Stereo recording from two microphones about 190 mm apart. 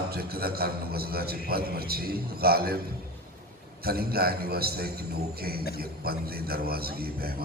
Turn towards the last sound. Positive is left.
turn(degrees=-55)  # may be behind; listen again after turning